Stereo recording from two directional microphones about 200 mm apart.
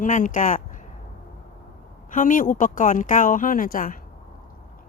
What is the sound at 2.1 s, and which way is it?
Speech, 40° left (ahead or behind).